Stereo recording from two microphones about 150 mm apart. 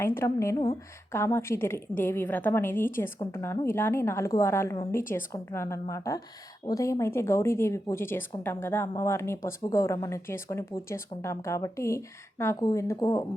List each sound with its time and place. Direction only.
0.0 s a woman's voice: 15° left (ahead or behind)